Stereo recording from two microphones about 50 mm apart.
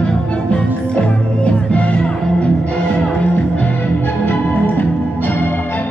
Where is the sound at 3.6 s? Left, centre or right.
Left.